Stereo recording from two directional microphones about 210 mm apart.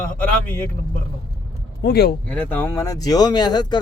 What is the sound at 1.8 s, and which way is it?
Speech, 50° left (ahead or behind).